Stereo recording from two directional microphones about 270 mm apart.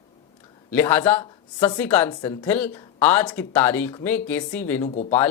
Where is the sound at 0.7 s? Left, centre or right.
Centre.